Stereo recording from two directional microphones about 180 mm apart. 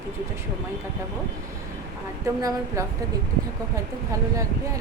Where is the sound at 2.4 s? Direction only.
20° right (ahead or behind).